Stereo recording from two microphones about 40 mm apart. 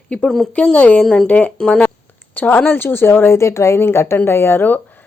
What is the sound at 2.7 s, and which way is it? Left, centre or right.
Speech, left.